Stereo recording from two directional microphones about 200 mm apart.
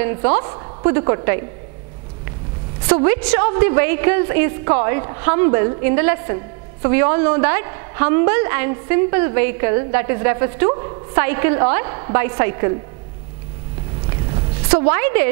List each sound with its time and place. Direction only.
0.0 s a woman's voice: 15° right (ahead or behind)
2.9 s a woman's voice: 10° right (ahead or behind)
14.7 s a woman's voice: 10° right (ahead or behind)